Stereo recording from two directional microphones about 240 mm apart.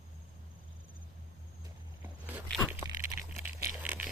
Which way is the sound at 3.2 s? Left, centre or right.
Left.